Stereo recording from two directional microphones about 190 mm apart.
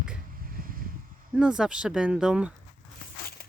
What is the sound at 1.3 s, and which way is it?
Speech, 5° right (ahead or behind).